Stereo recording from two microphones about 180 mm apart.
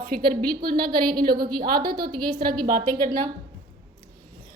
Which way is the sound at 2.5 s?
50° right (ahead or behind).